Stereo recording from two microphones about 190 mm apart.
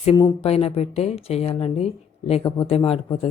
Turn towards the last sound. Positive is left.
turn(degrees=30)  # may be behind; listen again after turning